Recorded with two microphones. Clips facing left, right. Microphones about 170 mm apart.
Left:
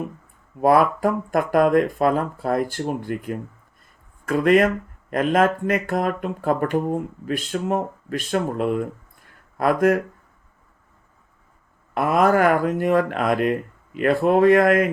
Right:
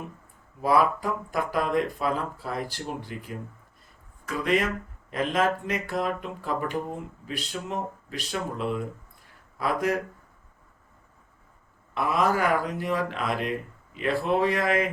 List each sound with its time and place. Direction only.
0.6 s speech: 55° left (ahead or behind)
11.9 s speech: 50° left (ahead or behind)